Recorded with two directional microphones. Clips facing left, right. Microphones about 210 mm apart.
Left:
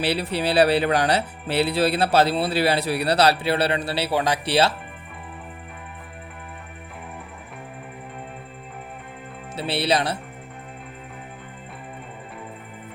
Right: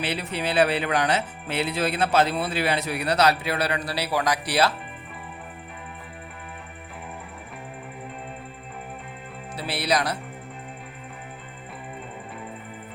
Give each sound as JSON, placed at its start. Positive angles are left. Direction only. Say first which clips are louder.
{"t": 0.0, "sound": "speech", "louder": "left 5 dB", "side_deg": 35}
{"t": 9.6, "sound": "speech", "louder": "left 3 dB", "side_deg": 25}